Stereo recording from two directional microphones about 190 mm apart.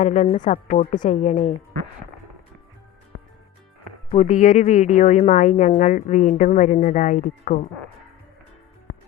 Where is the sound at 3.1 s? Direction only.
75° left (ahead or behind).